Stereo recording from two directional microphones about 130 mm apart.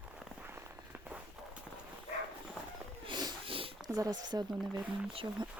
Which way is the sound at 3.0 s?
35° right (ahead or behind).